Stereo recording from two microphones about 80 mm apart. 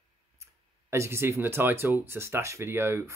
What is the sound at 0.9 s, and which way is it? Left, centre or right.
Speech, right.